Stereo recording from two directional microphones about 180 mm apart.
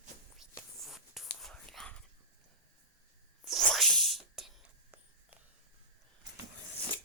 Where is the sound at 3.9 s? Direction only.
Centre (ahead or behind).